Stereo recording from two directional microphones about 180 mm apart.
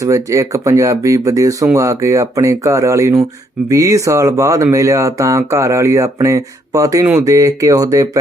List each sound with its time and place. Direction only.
0.0 s speech: 15° right (ahead or behind)